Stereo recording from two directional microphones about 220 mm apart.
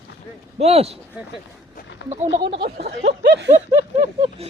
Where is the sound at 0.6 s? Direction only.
30° right (ahead or behind).